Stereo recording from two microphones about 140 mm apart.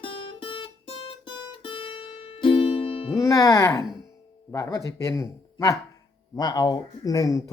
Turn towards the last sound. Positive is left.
turn(degrees=25)  # may be behind; listen again after turning